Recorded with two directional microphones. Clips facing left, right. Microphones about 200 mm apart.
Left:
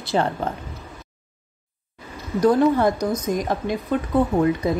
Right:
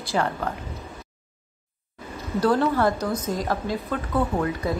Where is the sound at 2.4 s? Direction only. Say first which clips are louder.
Left 4 dB; 15° left (ahead or behind).